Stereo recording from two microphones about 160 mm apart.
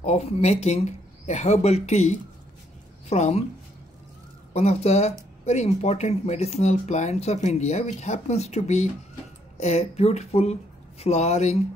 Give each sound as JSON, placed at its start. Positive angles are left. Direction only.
{"t": 0.0, "sound": "speech", "side_deg": 40}
{"t": 4.6, "sound": "speech", "side_deg": 40}